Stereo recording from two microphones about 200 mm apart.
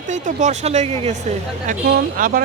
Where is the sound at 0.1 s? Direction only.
35° right (ahead or behind).